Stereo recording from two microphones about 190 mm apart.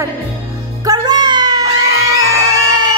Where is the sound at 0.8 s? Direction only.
20° right (ahead or behind).